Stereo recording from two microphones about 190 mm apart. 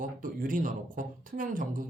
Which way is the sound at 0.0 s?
45° right (ahead or behind).